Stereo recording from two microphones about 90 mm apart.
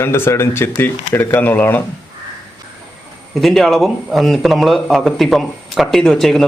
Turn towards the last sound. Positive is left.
turn(degrees=5)  # may be behind; listen again after turning